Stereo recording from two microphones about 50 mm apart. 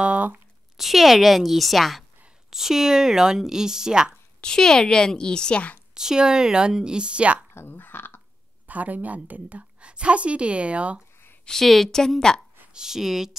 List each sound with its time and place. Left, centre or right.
0.0 s a sound: right
0.7 s a woman's voice: centre
4.4 s a woman's voice: centre
5.9 s speech: centre
7.5 s a sound: left
8.6 s a woman's voice: right
11.4 s a woman's voice: centre
12.7 s speech: centre